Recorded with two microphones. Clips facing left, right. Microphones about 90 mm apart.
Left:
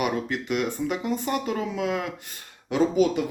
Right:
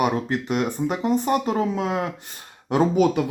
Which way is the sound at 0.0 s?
35° right (ahead or behind).